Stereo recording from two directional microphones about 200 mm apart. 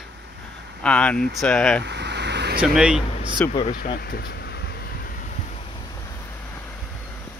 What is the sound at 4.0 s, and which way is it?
Vehicle, 50° left (ahead or behind).